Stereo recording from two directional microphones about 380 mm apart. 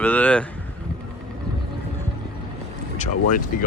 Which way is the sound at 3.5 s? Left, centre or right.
Left.